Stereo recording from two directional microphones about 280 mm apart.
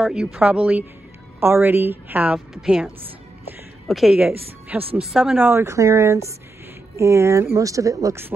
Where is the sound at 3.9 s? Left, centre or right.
Centre.